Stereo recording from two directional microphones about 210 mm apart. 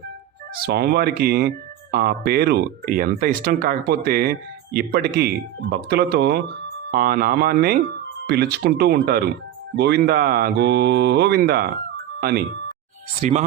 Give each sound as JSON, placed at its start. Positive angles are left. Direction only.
{"t": 0.5, "sound": "speech", "side_deg": -45}
{"t": 13.2, "sound": "speech", "side_deg": -30}